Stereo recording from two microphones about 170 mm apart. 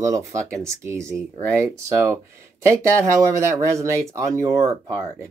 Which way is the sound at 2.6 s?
15° right (ahead or behind).